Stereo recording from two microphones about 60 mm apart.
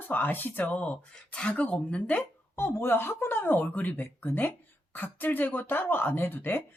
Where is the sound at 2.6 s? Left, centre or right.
Left.